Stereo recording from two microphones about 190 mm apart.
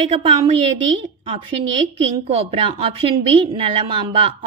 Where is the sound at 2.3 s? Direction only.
30° right (ahead or behind).